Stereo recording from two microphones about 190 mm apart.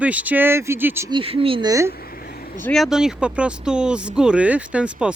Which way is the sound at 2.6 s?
5° left (ahead or behind).